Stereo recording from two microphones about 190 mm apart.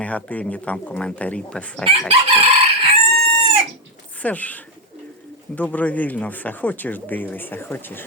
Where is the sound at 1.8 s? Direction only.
30° right (ahead or behind).